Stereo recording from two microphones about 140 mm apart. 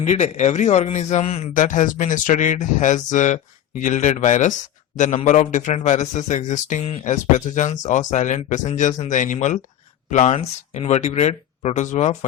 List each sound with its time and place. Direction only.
0.0 s speech: 55° left (ahead or behind)
1.5 s a man's voice: 65° left (ahead or behind)